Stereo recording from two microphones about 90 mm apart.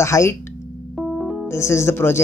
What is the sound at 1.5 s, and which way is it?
Speech, 30° left (ahead or behind).